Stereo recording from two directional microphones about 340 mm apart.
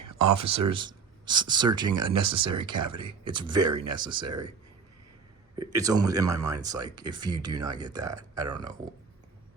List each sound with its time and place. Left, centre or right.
0.0 s a sound: right
0.7 s speech: centre
5.5 s speech: centre